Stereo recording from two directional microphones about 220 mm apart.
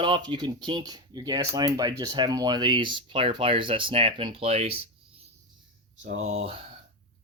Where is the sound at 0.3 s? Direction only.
20° right (ahead or behind).